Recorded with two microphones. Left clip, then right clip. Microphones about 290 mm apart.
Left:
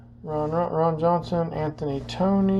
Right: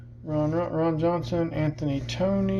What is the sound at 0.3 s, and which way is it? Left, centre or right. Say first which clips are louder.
Speech: left 2 dB; left.